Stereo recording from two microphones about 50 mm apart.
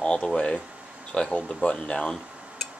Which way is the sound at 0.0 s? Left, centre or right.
Centre.